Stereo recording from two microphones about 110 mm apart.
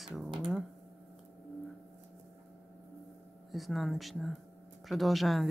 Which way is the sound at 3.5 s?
Centre (ahead or behind).